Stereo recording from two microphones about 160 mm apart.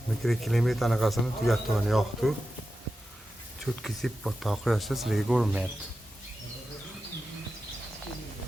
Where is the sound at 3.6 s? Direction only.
Centre (ahead or behind).